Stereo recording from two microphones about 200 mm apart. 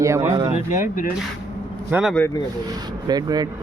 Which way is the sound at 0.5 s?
40° left (ahead or behind).